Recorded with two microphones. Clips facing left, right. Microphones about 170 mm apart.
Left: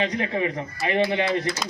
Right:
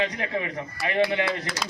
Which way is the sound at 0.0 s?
25° left (ahead or behind).